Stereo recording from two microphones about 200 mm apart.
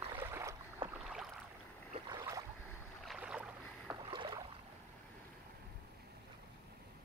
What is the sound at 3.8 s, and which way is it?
Boat, 20° right (ahead or behind).